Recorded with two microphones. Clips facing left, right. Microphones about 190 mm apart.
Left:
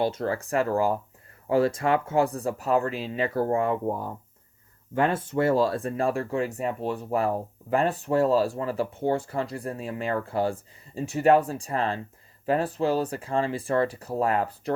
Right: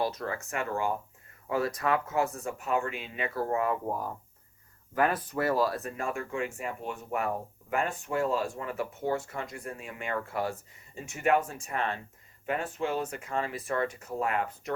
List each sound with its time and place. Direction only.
0.0 s speech: 30° left (ahead or behind)